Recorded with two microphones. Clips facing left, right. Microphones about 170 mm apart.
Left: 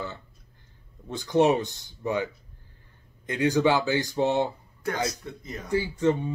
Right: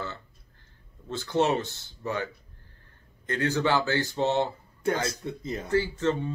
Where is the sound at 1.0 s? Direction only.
15° left (ahead or behind).